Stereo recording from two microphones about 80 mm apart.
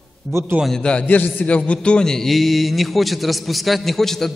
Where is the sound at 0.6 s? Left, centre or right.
Centre.